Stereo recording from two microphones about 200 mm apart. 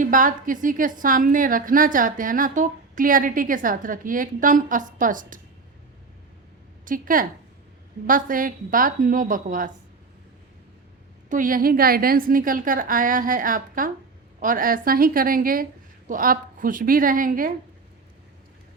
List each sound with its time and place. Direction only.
0.0 s a woman's voice: 45° right (ahead or behind)
6.8 s a woman's voice: 45° right (ahead or behind)
11.3 s a woman's voice: 45° right (ahead or behind)